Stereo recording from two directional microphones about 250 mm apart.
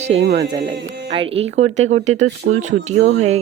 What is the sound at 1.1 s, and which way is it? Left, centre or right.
Speech, right.